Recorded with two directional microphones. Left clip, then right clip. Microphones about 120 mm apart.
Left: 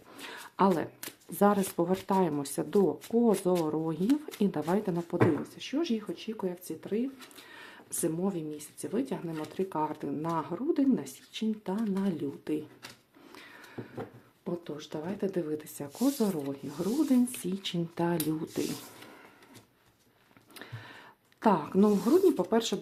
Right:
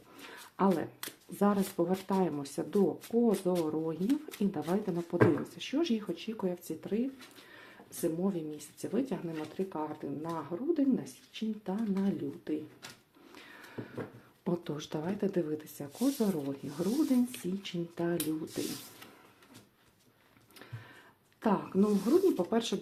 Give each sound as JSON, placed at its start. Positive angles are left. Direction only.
{"t": 0.2, "sound": "a sound", "side_deg": 35}
{"t": 1.4, "sound": "speech", "side_deg": 30}
{"t": 4.0, "sound": "speech", "side_deg": 15}
{"t": 4.7, "sound": "speech", "side_deg": 30}
{"t": 5.1, "sound": "speech", "side_deg": 10}
{"t": 7.5, "sound": "speech", "side_deg": 35}
{"t": 13.3, "sound": "a sound", "side_deg": 10}
{"t": 13.7, "sound": "a sound", "side_deg": -5}
{"t": 14.4, "sound": "speech", "side_deg": -20}
{"t": 14.9, "sound": "speech", "side_deg": 0}
{"t": 16.5, "sound": "speech", "side_deg": 15}
{"t": 17.5, "sound": "speech", "side_deg": 40}
{"t": 21.4, "sound": "speech", "side_deg": 40}